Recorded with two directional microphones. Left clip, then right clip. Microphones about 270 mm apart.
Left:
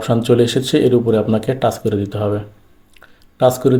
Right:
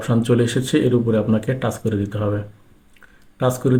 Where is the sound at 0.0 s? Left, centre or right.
Centre.